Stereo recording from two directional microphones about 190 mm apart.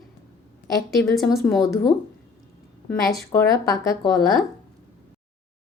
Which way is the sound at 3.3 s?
15° left (ahead or behind).